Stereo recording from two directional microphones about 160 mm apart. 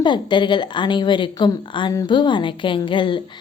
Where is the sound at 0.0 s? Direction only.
30° left (ahead or behind).